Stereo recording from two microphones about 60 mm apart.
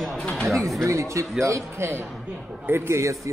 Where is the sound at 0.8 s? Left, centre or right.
Right.